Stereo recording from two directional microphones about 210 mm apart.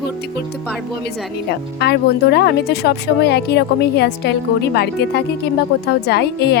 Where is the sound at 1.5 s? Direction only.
50° left (ahead or behind).